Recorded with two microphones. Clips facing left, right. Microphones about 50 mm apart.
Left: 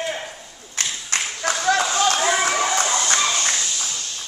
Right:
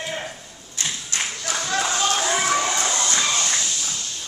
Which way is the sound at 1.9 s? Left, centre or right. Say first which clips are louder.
Left 3 dB; left.